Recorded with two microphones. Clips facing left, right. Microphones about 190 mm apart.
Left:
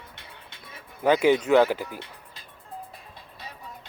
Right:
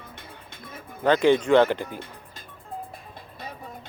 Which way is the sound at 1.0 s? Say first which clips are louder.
Right 1 dB; 10° left (ahead or behind).